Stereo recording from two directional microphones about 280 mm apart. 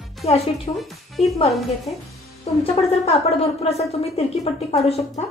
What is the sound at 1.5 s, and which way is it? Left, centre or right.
Speech, centre.